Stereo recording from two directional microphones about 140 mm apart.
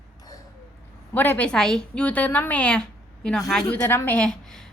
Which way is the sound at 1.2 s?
10° left (ahead or behind).